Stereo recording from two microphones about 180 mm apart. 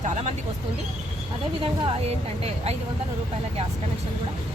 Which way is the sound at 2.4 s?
35° right (ahead or behind).